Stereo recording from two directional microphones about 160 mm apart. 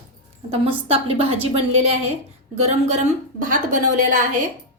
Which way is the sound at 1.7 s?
40° right (ahead or behind).